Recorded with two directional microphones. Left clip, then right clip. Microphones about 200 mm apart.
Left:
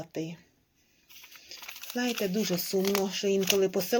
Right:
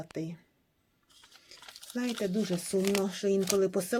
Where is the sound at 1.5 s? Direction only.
10° right (ahead or behind).